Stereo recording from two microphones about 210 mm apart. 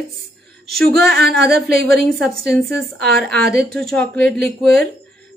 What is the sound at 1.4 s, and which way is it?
Speech, 50° right (ahead or behind).